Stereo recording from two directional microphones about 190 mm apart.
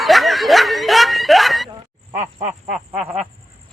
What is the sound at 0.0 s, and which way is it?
Snicker, centre (ahead or behind).